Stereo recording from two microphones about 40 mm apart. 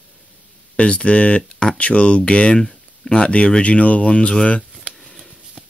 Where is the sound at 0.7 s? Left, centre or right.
Left.